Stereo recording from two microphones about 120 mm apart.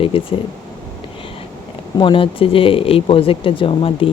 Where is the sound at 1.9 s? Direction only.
45° left (ahead or behind).